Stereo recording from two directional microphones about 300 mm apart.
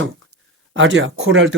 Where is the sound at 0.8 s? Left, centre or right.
Right.